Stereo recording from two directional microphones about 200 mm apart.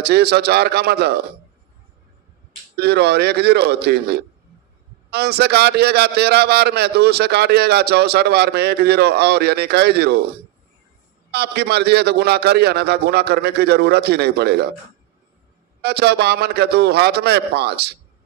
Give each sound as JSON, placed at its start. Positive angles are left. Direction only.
{"t": 0.0, "sound": "a man's voice", "side_deg": -55}
{"t": 2.8, "sound": "a man's voice", "side_deg": -55}
{"t": 11.3, "sound": "a man's voice", "side_deg": -55}
{"t": 15.8, "sound": "a man's voice", "side_deg": -55}